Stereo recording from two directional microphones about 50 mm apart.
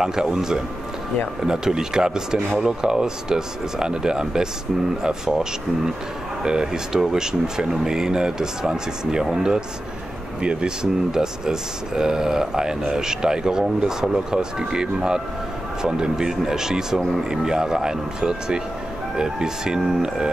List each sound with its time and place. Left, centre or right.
0.0 s speech: centre